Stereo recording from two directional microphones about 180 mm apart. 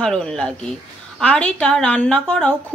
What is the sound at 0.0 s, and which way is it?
A woman's voice, 5° left (ahead or behind).